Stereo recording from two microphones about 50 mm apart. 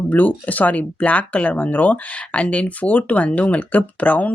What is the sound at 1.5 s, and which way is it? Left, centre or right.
Speech, left.